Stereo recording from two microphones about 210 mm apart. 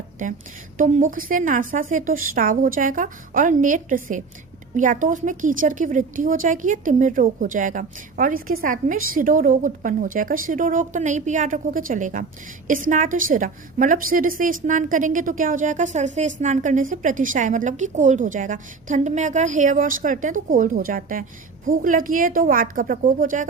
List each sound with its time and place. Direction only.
0.8 s a woman's voice: 35° right (ahead or behind)